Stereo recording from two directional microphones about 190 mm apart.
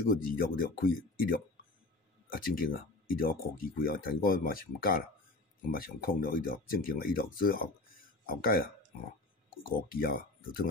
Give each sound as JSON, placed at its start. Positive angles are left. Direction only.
{"t": 0.1, "sound": "speech", "side_deg": 50}